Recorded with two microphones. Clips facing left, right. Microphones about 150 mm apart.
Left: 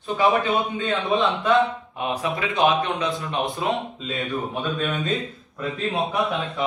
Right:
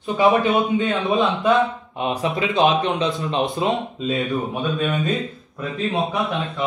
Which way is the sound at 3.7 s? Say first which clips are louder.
Right 4 dB; centre (ahead or behind).